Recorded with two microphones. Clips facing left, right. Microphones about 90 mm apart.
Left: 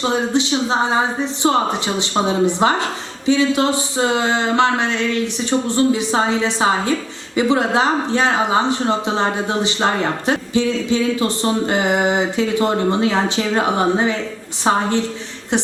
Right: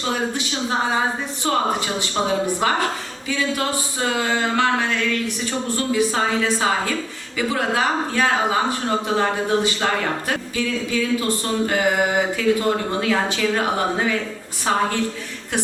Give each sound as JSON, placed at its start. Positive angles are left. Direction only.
{"t": 0.0, "sound": "a woman's voice", "side_deg": 20}